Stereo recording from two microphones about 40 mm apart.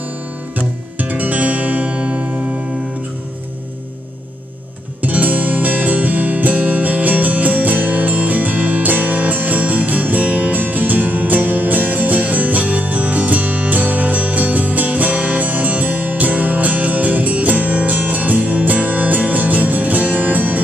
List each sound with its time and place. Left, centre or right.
0.6 s music: right
5.0 s music: right